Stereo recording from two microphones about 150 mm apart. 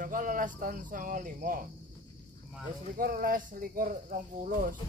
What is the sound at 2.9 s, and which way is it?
Speech, 70° right (ahead or behind).